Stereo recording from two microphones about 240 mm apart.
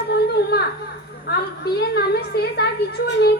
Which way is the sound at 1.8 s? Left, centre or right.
Left.